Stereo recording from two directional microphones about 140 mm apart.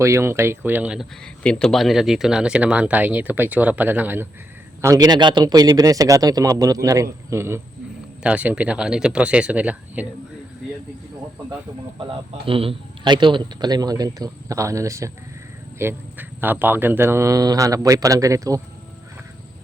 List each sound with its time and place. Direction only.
0.0 s speech: 20° right (ahead or behind)
1.2 s speech: 5° left (ahead or behind); by 4.3 s 15° right (ahead or behind)
4.8 s speech: 25° right (ahead or behind)
12.5 s speech: 40° right (ahead or behind); by 18.6 s 25° right (ahead or behind)